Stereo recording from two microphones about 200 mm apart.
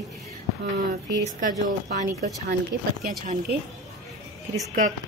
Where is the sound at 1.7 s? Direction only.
40° right (ahead or behind).